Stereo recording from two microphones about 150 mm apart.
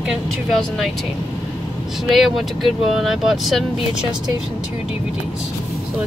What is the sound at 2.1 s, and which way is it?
Speech, centre (ahead or behind).